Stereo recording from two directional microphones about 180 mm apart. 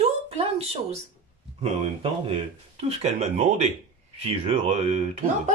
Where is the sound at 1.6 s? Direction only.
35° right (ahead or behind).